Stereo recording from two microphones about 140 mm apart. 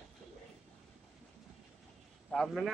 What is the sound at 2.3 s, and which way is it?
Speech, centre (ahead or behind).